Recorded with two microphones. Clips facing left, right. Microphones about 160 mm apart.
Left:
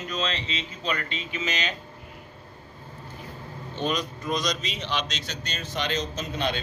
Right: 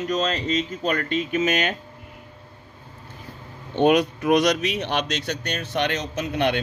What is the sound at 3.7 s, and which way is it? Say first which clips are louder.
Speech: right 11 dB; 60° right (ahead or behind).